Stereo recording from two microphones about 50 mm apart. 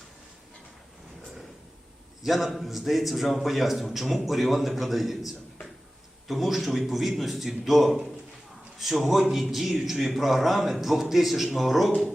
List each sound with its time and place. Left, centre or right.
2.2 s a man's voice: centre